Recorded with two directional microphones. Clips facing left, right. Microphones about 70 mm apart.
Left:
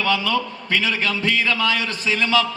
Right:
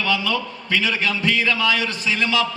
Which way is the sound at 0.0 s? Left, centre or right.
Left.